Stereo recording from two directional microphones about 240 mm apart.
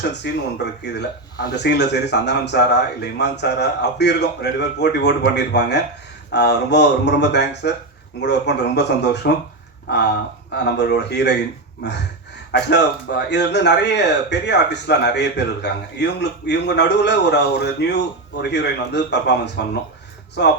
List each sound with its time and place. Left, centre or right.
0.2 s speech: left
10.7 s speech: left
12.5 s speech: left